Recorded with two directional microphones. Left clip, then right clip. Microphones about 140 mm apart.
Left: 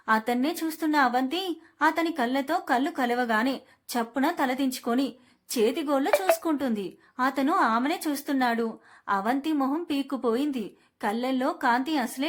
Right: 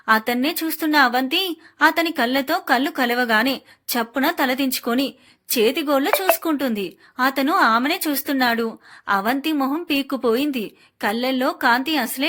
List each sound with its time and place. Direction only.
0.0 s a woman's voice: 20° right (ahead or behind)